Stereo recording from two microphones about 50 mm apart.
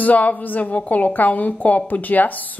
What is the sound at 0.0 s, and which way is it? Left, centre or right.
A woman's voice, left.